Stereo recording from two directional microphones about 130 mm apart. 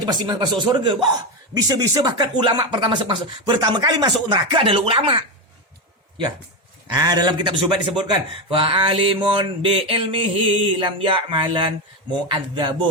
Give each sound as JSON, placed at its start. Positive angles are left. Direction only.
{"t": 0.0, "sound": "speech", "side_deg": -30}
{"t": 6.9, "sound": "speech", "side_deg": -30}